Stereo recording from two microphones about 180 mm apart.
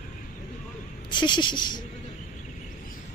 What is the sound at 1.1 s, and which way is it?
Speech, 25° left (ahead or behind).